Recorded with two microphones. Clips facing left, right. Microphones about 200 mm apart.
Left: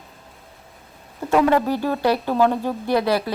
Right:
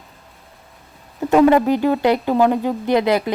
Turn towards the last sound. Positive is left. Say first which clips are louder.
# right 3 dB
turn(degrees=-20)  # may be behind; listen again after turning